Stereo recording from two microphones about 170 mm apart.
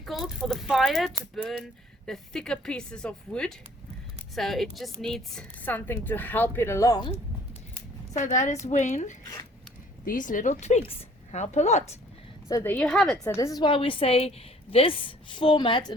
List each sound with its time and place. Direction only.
0.0 s a woman's voice: centre (ahead or behind); by 7.1 s 20° left (ahead or behind)
8.1 s speech: 45° left (ahead or behind)
12.5 s speech: 20° left (ahead or behind)
12.7 s a woman's voice: 5° left (ahead or behind)
13.2 s a woman's voice: 20° left (ahead or behind)